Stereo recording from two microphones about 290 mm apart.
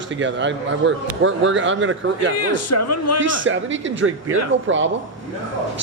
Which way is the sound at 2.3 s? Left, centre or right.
Left.